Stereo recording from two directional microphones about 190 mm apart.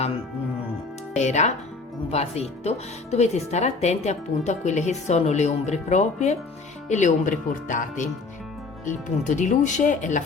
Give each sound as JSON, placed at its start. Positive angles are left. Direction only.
{"t": 1.1, "sound": "speech", "side_deg": 35}